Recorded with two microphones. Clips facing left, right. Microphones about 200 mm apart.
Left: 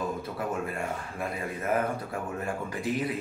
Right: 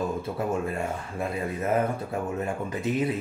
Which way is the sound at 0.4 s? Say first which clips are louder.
Right 4 dB; 25° right (ahead or behind).